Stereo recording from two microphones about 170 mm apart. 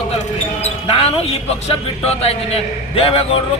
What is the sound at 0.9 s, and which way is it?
A man's voice, 35° left (ahead or behind).